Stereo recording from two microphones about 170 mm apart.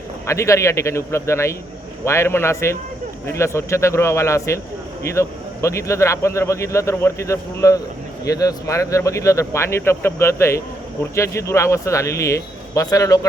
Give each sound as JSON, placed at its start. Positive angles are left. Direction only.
{"t": 0.3, "sound": "speech", "side_deg": 15}